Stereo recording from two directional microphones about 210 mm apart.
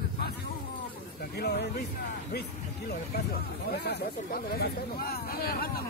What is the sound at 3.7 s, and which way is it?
Speech, 50° left (ahead or behind).